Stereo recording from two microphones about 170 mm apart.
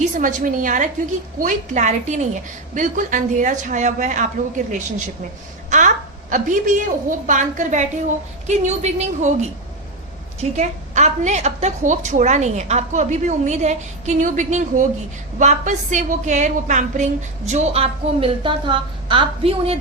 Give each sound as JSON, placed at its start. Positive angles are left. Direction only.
{"t": 0.0, "sound": "a woman's voice", "side_deg": -50}
{"t": 6.3, "sound": "a woman's voice", "side_deg": -50}
{"t": 10.6, "sound": "a woman's voice", "side_deg": -45}